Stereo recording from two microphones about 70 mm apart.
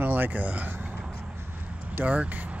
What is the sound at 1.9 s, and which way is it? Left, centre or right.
Speech, right.